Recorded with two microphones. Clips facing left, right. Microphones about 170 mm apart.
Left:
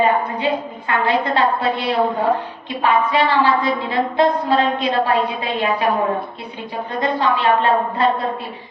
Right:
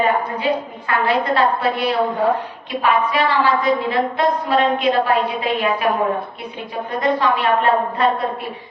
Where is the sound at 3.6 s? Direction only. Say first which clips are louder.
Right 2 dB; 30° left (ahead or behind).